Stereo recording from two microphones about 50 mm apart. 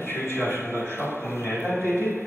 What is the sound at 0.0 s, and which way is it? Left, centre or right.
A man's voice, left.